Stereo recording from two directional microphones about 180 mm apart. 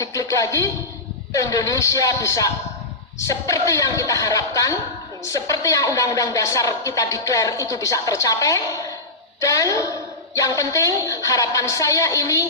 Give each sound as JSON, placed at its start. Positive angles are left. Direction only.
{"t": 0.0, "sound": "speech", "side_deg": 20}